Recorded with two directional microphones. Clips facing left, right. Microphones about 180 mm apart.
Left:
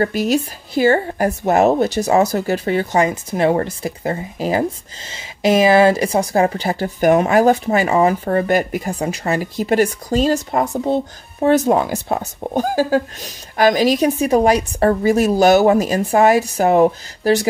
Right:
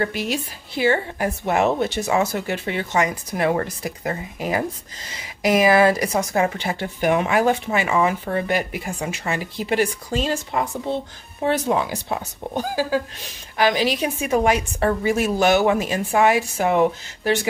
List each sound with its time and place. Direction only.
0.0 s speech: 40° left (ahead or behind)
3.1 s speech: 25° left (ahead or behind)